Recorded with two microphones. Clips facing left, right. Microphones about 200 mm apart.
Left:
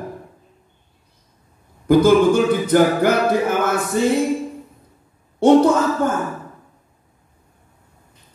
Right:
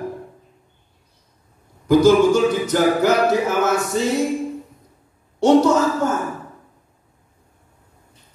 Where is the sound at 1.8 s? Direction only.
55° left (ahead or behind).